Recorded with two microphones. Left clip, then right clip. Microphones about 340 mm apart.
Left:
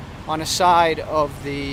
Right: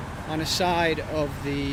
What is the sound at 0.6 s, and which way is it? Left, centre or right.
Speech, centre.